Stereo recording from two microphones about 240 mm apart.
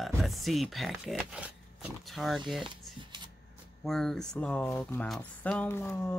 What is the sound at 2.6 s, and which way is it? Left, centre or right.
Shuffling cards, centre.